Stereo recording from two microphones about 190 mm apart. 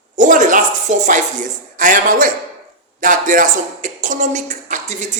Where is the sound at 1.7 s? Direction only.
45° right (ahead or behind).